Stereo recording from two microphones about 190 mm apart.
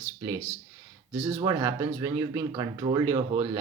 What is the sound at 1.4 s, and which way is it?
Speech, 15° right (ahead or behind).